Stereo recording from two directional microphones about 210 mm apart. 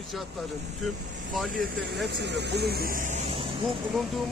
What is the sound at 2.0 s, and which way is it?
Speech, 55° right (ahead or behind).